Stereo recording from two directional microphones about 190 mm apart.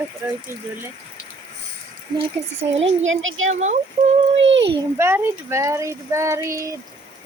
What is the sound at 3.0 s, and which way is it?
Speech, 90° right.